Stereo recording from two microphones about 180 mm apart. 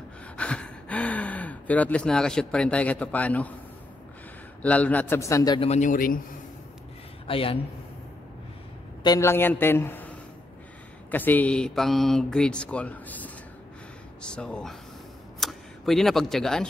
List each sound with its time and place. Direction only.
0.4 s speech: 5° left (ahead or behind)
4.6 s a man's voice: 10° left (ahead or behind)
5.6 s a man's voice: 40° left (ahead or behind)
7.2 s a woman's voice: 30° left (ahead or behind)
9.0 s a man's voice: 15° left (ahead or behind)